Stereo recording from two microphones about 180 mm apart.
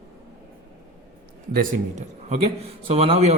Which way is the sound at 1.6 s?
40° right (ahead or behind).